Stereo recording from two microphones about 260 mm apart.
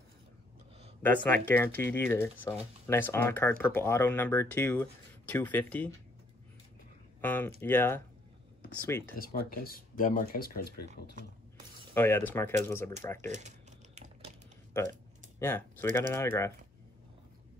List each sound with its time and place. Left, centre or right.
1.0 s speech: centre
7.2 s speech: centre
9.2 s speech: left
11.9 s speech: centre
13.3 s typing: right
14.7 s a sound: centre
16.1 s speech: centre